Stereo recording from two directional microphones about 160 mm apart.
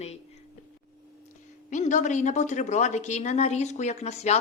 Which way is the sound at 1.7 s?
50° left (ahead or behind).